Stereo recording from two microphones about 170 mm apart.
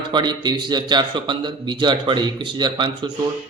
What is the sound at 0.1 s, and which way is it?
A man's voice, 25° right (ahead or behind).